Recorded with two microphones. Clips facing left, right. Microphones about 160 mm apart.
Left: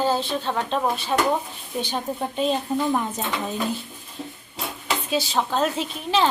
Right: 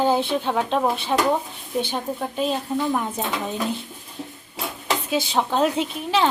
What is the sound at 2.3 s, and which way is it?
Speech, 5° right (ahead or behind).